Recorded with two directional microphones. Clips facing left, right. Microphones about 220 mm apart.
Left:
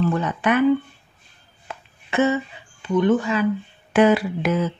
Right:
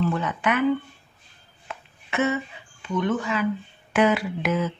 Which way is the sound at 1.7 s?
35° left (ahead or behind).